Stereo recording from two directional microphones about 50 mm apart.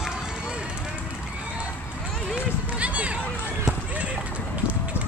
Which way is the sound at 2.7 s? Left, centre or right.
Right.